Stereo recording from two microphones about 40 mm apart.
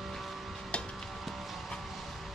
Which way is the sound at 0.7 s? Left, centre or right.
Left.